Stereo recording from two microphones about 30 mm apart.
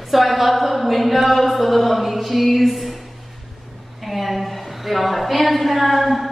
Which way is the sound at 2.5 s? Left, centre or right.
Centre.